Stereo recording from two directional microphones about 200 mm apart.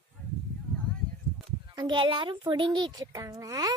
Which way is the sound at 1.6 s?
20° right (ahead or behind).